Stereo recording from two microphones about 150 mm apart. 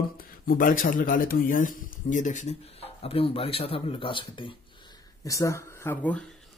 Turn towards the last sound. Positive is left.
turn(degrees=10)  # may be behind; listen again after turning